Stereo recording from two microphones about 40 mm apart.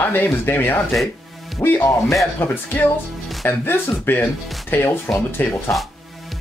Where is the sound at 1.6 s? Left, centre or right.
Left.